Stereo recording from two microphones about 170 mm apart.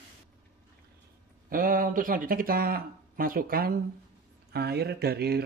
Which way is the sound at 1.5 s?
55° right (ahead or behind).